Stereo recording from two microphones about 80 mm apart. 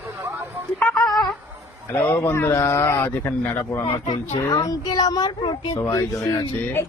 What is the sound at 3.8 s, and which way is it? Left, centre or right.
Speech, left.